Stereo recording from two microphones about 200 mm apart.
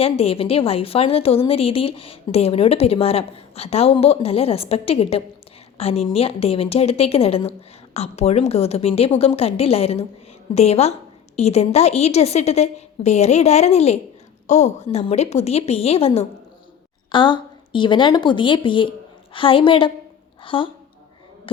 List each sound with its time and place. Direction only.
0.0 s a woman's voice: 30° left (ahead or behind)